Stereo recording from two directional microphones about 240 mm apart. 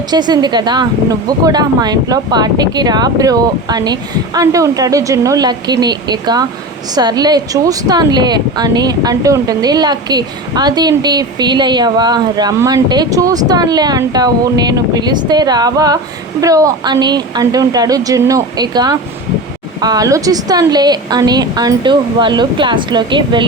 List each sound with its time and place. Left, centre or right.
0.1 s speech: centre